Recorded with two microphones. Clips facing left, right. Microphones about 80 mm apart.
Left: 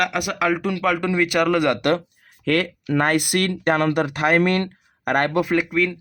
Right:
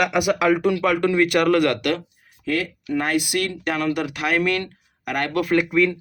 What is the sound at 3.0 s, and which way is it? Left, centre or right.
Speech, left.